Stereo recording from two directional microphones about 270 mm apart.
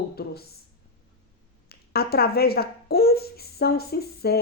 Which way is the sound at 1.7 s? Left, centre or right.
Left.